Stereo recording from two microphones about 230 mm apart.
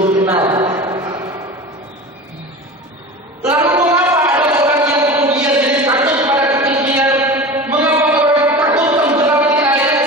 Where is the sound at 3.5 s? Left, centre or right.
Centre.